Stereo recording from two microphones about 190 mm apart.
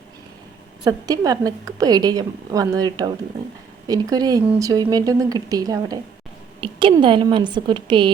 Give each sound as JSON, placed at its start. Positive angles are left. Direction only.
{"t": 0.9, "sound": "a woman's voice", "side_deg": -20}